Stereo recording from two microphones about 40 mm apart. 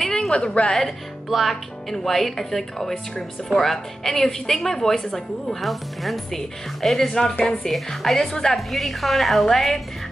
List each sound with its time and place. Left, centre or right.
0.0 s a sound: centre
0.4 s a woman's voice: left
0.8 s a woman's voice: centre
8.3 s speech: centre
8.5 s a woman's voice: centre